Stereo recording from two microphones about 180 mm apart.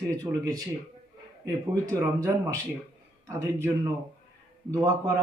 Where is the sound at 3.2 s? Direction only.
15° right (ahead or behind).